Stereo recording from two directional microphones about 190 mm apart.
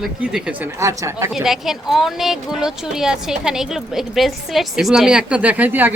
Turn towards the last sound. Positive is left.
turn(degrees=-10)  # may be behind; listen again after turning